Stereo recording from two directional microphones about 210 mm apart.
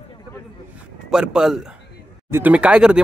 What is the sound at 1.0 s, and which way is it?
Speech, 5° right (ahead or behind).